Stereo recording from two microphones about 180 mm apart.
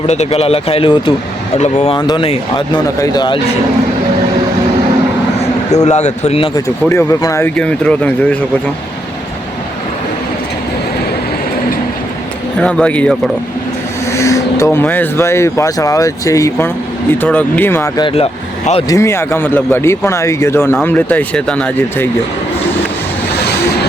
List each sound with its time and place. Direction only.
0.1 s speech: 35° left (ahead or behind)
2.0 s speech: 25° left (ahead or behind)
5.7 s speech: 40° left (ahead or behind)
6.8 s speech: 15° left (ahead or behind)
12.5 s speech: 5° left (ahead or behind)
18.0 s speech: 35° left (ahead or behind)
18.9 s speech: 15° left (ahead or behind)